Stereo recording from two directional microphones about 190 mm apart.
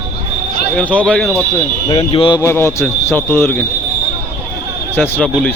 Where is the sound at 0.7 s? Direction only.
5° left (ahead or behind).